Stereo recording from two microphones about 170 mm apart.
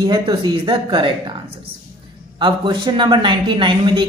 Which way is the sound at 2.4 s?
30° right (ahead or behind).